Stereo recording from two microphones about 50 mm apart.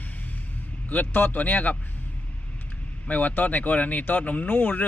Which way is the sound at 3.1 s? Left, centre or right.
Left.